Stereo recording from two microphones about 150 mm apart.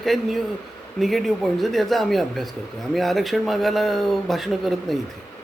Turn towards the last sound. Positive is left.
turn(degrees=0)  # may be behind; listen again after turning